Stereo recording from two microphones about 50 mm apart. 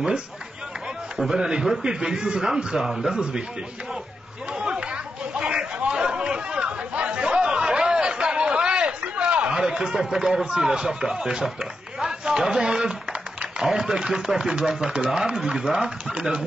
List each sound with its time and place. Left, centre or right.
1.1 s a man's voice: centre
4.5 s chatter: right
13.6 s a man's voice: centre